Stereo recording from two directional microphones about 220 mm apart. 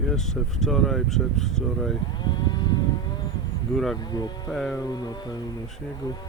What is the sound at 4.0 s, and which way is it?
Speech, 20° left (ahead or behind).